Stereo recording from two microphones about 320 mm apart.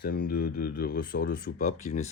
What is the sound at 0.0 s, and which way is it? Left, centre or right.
Speech, left.